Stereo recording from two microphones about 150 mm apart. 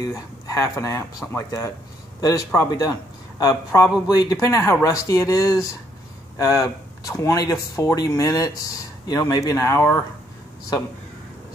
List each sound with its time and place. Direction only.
0.0 s speech: 20° left (ahead or behind)